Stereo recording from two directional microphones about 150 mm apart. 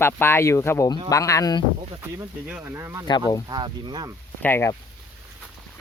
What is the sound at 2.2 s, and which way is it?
Speech, 15° right (ahead or behind).